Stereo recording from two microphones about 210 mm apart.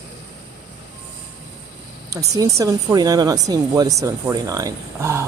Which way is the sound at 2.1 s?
15° right (ahead or behind).